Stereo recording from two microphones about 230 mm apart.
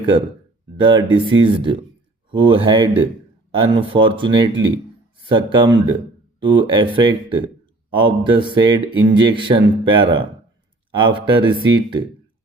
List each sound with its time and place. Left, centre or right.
0.8 s speech: right